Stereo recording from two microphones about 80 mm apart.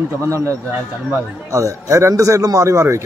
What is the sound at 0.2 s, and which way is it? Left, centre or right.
Speech, right.